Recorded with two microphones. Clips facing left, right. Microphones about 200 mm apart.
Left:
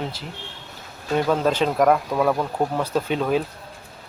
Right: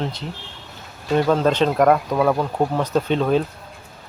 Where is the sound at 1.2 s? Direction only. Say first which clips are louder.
Right 2 dB; 5° left (ahead or behind).